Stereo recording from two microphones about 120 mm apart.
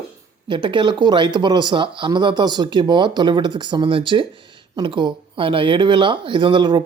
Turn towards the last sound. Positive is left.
turn(degrees=-45)  # may be behind; listen again after turning